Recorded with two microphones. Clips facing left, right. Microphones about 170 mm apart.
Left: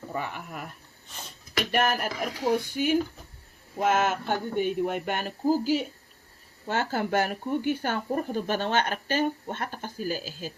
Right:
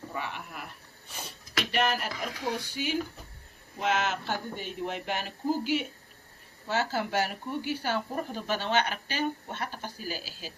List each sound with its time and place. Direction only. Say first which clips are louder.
0.1 s speech: left 4 dB; 45° left (ahead or behind)
1.9 s speech: left 3 dB; 50° left (ahead or behind)
6.7 s speech: left 2 dB; 50° left (ahead or behind)